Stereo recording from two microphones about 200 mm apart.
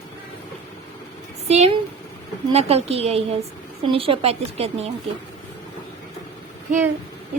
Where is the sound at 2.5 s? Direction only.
30° right (ahead or behind).